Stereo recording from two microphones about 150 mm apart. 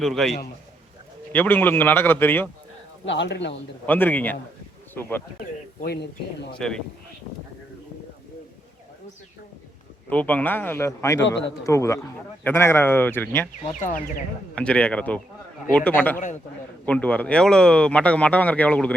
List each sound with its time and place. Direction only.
0.0 s a man's voice: centre (ahead or behind)
1.3 s speech: 10° left (ahead or behind)
3.8 s speech: 10° left (ahead or behind)
5.8 s speech: 90° left
6.6 s a man's voice: 5° left (ahead or behind)
10.1 s speech: 10° left (ahead or behind)
13.7 s a man's voice: 60° left (ahead or behind)
14.5 s speech: 10° left (ahead or behind)
16.1 s a man's voice: 55° left (ahead or behind)
16.8 s speech: 10° left (ahead or behind)